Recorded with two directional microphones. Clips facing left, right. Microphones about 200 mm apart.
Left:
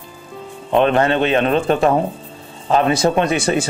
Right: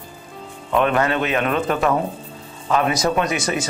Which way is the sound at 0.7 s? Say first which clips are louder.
Left 4 dB; 30° left (ahead or behind).